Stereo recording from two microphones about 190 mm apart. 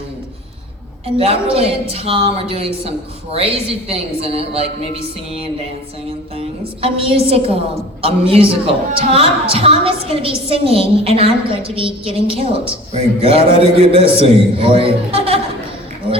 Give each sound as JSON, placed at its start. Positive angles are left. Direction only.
{"t": 1.0, "sound": "a woman's voice", "side_deg": -30}
{"t": 6.8, "sound": "a woman's voice", "side_deg": -30}